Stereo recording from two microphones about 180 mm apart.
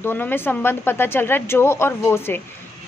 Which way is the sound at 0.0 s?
10° left (ahead or behind).